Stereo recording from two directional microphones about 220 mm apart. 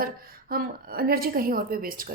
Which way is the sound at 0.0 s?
40° right (ahead or behind).